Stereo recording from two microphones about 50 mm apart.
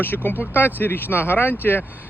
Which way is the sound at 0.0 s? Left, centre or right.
Left.